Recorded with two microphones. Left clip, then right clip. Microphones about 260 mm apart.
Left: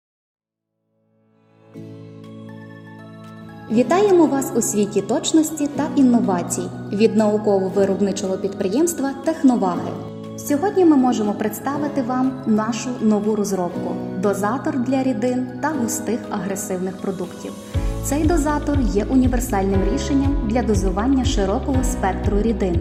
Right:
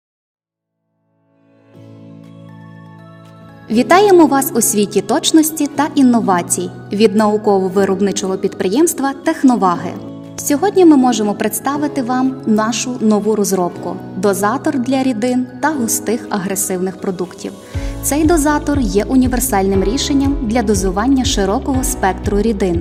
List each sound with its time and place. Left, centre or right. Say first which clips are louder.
3.7 s a woman's voice: right 6 dB; right